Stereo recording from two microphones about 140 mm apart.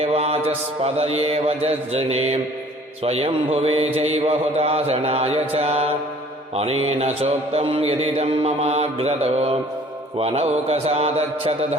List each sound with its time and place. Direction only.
0.0 s mantra: 45° right (ahead or behind)